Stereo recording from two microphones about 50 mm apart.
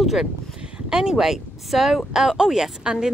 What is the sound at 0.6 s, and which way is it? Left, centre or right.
Speech, centre.